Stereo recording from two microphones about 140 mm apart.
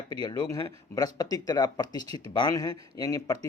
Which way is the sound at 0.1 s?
30° left (ahead or behind).